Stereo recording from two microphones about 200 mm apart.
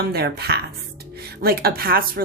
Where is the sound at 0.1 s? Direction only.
50° right (ahead or behind).